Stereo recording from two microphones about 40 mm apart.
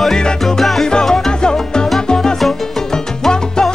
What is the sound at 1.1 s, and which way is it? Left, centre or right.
Music, centre.